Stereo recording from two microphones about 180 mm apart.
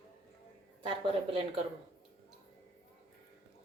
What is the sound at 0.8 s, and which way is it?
Speech, 30° right (ahead or behind).